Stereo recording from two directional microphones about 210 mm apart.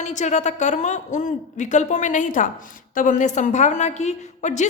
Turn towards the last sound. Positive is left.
turn(degrees=35)  # may be behind; listen again after turning